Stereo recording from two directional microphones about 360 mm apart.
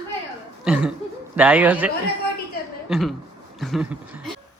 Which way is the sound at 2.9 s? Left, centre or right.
Centre.